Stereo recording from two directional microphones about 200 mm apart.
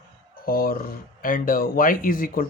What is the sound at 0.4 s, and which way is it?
Speech, 45° left (ahead or behind).